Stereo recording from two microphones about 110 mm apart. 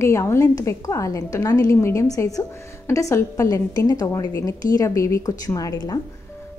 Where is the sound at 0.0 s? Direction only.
25° left (ahead or behind).